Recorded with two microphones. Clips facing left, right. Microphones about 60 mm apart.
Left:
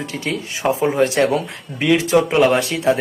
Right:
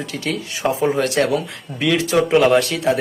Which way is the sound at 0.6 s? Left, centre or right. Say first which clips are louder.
Left 2 dB; centre.